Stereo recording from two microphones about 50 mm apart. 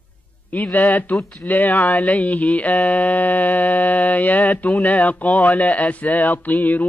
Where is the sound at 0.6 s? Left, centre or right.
Left.